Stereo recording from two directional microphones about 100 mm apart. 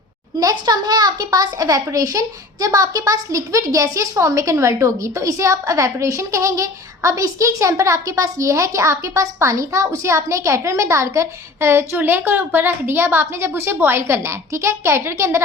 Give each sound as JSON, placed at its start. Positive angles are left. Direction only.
{"t": 0.3, "sound": "a woman's voice", "side_deg": -40}